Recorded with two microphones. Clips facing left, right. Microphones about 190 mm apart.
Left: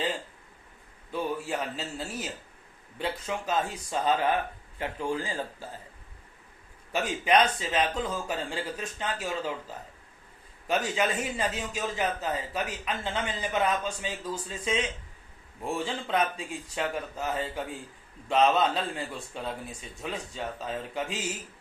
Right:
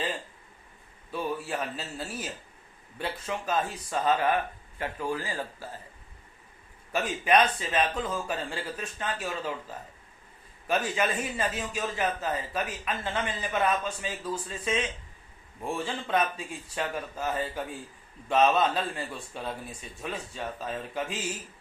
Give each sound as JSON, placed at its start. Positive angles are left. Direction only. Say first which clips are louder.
{"t": 1.1, "sound": "speech", "louder": "left 1 dB", "side_deg": 20}
{"t": 4.8, "sound": "speech", "louder": "left 1 dB", "side_deg": 20}
{"t": 6.9, "sound": "speech", "louder": "even", "side_deg": 20}
{"t": 10.7, "sound": "speech", "louder": "even", "side_deg": 15}